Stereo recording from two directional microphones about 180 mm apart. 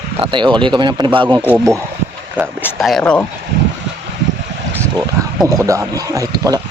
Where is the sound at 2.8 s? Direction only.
Centre (ahead or behind).